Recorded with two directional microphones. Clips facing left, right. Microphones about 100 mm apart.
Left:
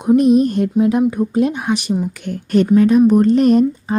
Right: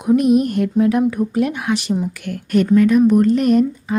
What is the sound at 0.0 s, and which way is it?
Speech, 25° left (ahead or behind).